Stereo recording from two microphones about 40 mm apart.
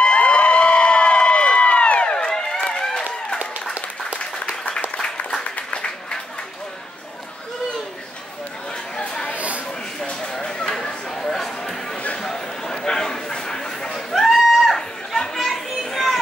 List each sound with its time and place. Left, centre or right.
0.0 s crowd: left
4.2 s applause: left
8.9 s chatter: centre
9.3 s a sound: right
10.2 s a sound: centre
14.8 s chatter: centre
15.7 s children playing: centre